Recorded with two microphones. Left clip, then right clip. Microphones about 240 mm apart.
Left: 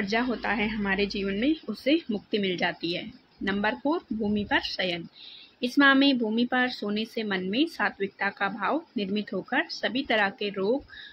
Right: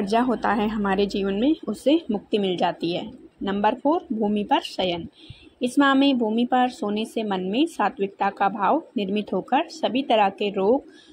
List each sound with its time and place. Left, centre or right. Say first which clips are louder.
0.0 s speech: right 6 dB; centre